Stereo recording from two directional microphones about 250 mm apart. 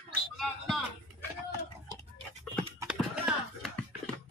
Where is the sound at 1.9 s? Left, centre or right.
Right.